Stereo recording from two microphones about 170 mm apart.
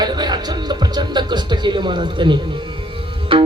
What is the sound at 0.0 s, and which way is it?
Speech, 25° right (ahead or behind).